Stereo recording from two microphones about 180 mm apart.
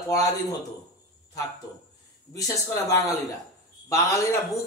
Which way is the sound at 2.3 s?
15° left (ahead or behind).